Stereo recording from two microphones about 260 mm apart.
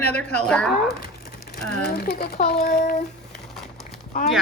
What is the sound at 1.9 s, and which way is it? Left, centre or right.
A child's voice, left.